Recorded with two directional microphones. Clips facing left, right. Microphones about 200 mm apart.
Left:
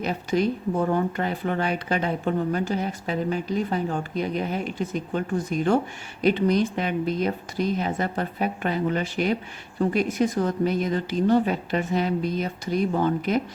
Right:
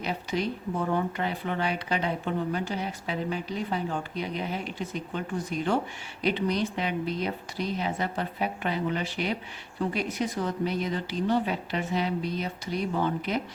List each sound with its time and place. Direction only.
0.0 s speech: 45° left (ahead or behind)